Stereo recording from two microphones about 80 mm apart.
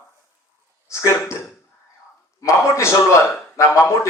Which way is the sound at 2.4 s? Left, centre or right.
Left.